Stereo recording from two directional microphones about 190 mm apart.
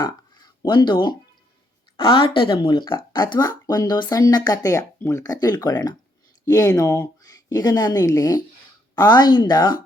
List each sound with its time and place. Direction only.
0.6 s speech: 25° left (ahead or behind)